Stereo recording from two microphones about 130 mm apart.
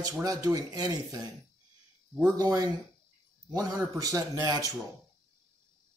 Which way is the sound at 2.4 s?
30° right (ahead or behind).